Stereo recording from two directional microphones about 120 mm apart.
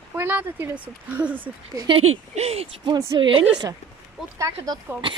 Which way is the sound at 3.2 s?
40° right (ahead or behind).